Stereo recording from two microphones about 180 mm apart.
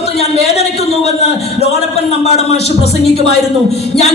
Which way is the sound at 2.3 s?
35° left (ahead or behind).